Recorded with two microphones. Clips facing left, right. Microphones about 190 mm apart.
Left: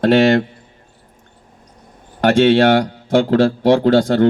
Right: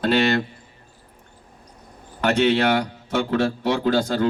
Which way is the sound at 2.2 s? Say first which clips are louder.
Left 7 dB; 50° left (ahead or behind).